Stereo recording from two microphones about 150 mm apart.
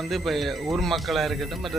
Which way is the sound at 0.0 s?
Centre (ahead or behind).